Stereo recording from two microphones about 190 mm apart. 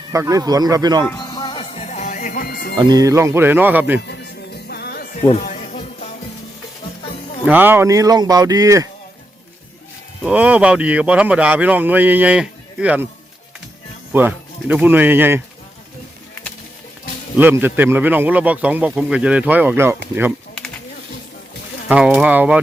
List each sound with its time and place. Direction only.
0.1 s speech: 15° right (ahead or behind)
1.0 s music: 20° left (ahead or behind); by 2.7 s 50° left (ahead or behind)
2.7 s speech: 20° right (ahead or behind)
4.0 s music: 60° left (ahead or behind)
5.3 s music: 40° left (ahead or behind)
7.4 s speech: 10° right (ahead or behind)
10.2 s speech: 5° right (ahead or behind)
14.1 s speech: 10° right (ahead or behind)
17.3 s speech: 10° right (ahead or behind)
21.8 s speech: 5° right (ahead or behind)